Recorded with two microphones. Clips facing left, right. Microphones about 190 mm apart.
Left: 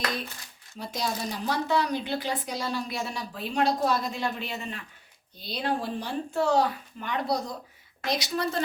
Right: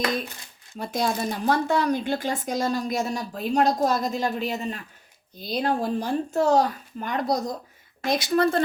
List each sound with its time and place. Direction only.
0.8 s speech: 50° right (ahead or behind)